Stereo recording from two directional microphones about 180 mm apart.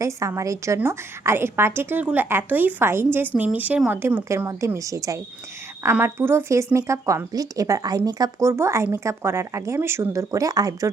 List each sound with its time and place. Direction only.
0.0 s a woman's voice: 15° right (ahead or behind)